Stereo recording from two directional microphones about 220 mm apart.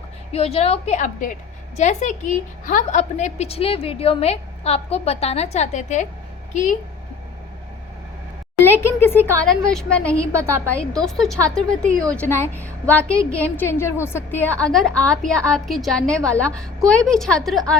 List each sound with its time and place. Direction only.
0.3 s a woman's voice: 30° left (ahead or behind)
8.6 s a woman's voice: 10° left (ahead or behind)
11.9 s a woman's voice: 15° right (ahead or behind)
12.1 s a woman's voice: 10° left (ahead or behind)